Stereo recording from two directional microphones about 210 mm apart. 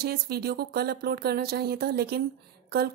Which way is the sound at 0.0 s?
50° right (ahead or behind).